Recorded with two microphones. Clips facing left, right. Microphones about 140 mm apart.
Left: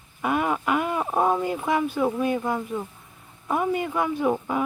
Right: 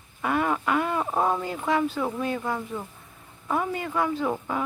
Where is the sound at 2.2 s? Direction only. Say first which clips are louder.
Left 4 dB; 15° left (ahead or behind).